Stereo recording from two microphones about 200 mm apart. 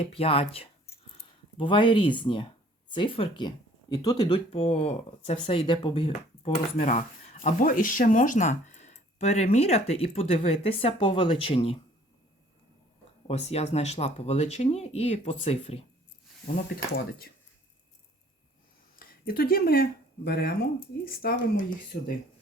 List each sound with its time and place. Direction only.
0.0 s speech: 30° left (ahead or behind)
13.2 s speech: 30° left (ahead or behind)
16.7 s speech: 50° left (ahead or behind)
18.9 s speech: 45° left (ahead or behind)